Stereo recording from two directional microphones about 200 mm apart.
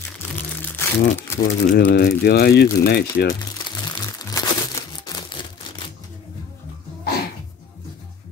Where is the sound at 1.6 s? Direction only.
55° left (ahead or behind).